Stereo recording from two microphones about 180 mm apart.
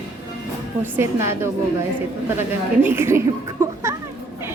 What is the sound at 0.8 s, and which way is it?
Speech, 15° right (ahead or behind).